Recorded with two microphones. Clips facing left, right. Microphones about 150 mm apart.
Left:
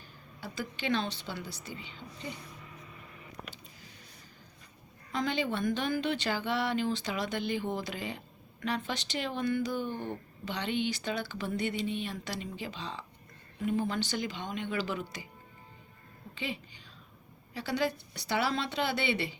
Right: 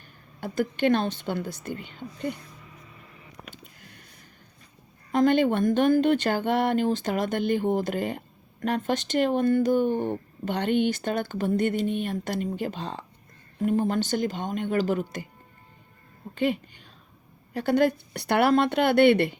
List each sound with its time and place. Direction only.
0.3 s speech: 55° right (ahead or behind)
3.5 s a sound: 60° right (ahead or behind)
5.1 s speech: 50° right (ahead or behind)
16.3 s a woman's voice: 50° right (ahead or behind)